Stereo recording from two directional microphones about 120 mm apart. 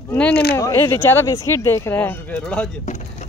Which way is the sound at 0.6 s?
25° left (ahead or behind).